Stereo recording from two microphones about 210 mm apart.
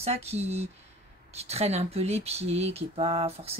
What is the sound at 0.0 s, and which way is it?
Speech, 30° right (ahead or behind).